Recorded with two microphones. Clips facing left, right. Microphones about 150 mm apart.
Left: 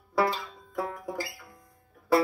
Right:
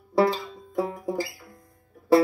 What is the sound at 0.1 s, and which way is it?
Banjo, 25° right (ahead or behind).